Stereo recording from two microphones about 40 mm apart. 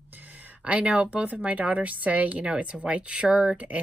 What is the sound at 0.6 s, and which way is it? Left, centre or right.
A woman's voice, right.